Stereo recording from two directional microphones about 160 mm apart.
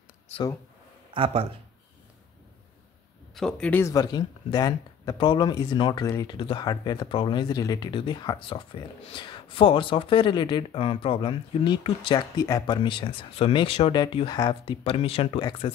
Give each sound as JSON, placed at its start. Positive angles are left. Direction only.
{"t": 1.1, "sound": "speech", "side_deg": -35}
{"t": 3.3, "sound": "speech", "side_deg": 5}
{"t": 3.8, "sound": "speech", "side_deg": 25}